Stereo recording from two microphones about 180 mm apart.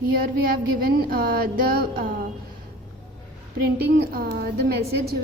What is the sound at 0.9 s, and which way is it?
Speech, 55° right (ahead or behind).